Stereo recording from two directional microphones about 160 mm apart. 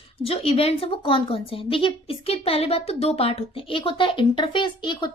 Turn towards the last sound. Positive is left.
turn(degrees=30)  # may be behind; listen again after turning